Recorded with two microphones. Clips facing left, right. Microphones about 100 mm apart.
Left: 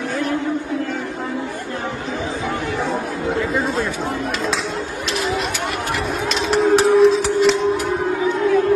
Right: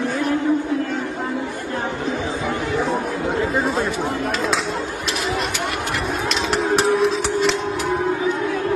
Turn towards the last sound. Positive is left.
turn(degrees=0)  # may be behind; listen again after turning